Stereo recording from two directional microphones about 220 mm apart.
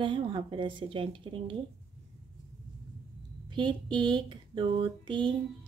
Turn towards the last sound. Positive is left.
turn(degrees=-20)  # may be behind; listen again after turning